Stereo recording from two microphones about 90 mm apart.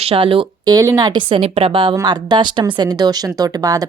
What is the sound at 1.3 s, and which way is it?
Speech, 85° right.